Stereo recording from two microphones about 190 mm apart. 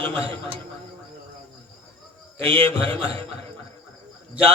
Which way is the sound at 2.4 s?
30° right (ahead or behind).